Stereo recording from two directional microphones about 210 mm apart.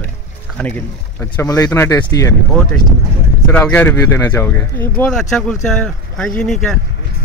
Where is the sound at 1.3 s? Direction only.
15° left (ahead or behind).